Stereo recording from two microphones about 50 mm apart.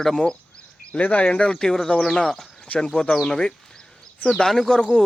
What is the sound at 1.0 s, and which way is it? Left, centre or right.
Speech, left.